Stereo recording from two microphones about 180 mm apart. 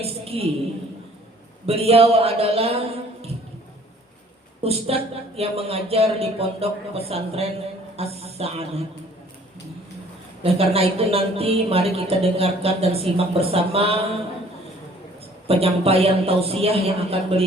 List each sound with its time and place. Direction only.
0.0 s a woman's voice: 35° right (ahead or behind)
1.6 s speech: 35° right (ahead or behind)
4.6 s speech: 35° right (ahead or behind)
10.4 s speech: 35° right (ahead or behind)
15.4 s speech: 35° right (ahead or behind)